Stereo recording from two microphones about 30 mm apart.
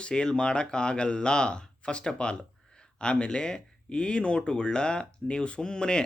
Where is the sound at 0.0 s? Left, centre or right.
Left.